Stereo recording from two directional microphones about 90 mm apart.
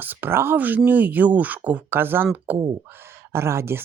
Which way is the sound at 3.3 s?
30° right (ahead or behind).